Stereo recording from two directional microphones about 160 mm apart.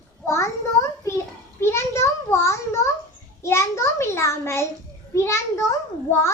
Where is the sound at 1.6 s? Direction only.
15° left (ahead or behind).